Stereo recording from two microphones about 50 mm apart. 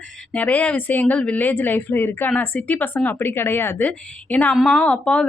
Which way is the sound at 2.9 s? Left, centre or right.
Left.